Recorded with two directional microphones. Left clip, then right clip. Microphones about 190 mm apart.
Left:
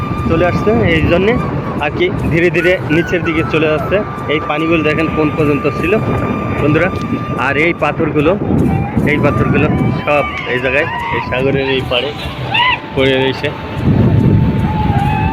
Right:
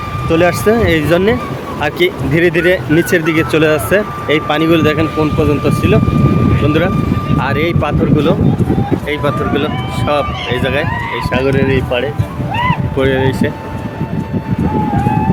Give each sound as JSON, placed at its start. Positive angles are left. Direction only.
{"t": 0.3, "sound": "speech", "side_deg": -30}
{"t": 3.1, "sound": "speech", "side_deg": -30}
{"t": 4.9, "sound": "speech", "side_deg": -15}
{"t": 13.1, "sound": "speech", "side_deg": -50}